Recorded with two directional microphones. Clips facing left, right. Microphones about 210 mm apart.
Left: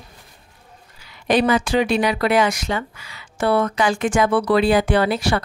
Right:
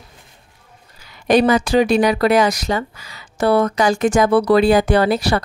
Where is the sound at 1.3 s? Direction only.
40° right (ahead or behind).